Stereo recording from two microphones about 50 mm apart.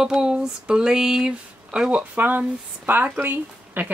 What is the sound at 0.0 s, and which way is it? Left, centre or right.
Speech, centre.